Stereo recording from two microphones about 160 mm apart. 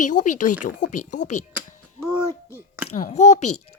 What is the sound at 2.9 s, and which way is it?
Speech, 50° left (ahead or behind).